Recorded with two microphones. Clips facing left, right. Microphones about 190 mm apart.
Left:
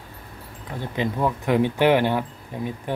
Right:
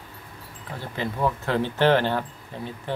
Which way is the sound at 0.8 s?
15° left (ahead or behind).